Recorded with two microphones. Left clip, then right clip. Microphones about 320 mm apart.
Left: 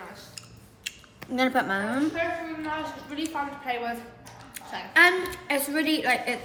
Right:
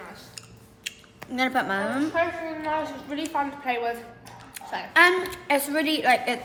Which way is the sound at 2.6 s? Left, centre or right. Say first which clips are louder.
Right 4 dB; right.